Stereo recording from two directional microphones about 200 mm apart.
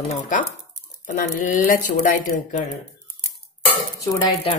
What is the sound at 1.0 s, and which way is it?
Speech, 40° left (ahead or behind).